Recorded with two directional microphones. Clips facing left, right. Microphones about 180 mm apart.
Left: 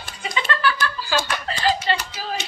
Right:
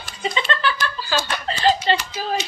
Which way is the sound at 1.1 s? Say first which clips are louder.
Even; 10° left (ahead or behind).